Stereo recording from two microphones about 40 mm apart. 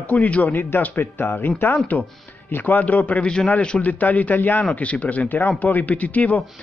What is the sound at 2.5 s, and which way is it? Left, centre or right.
A man's voice, left.